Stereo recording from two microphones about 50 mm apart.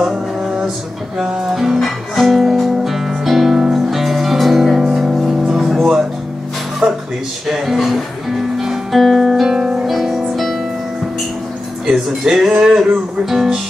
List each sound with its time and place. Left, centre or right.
0.0 s music: centre
6.8 s music: right
7.4 s music: centre
9.5 s music: centre
11.9 s speech: centre